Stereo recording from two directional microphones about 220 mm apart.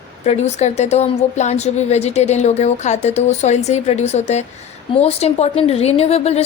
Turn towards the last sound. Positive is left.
turn(degrees=30)  # may be behind; listen again after turning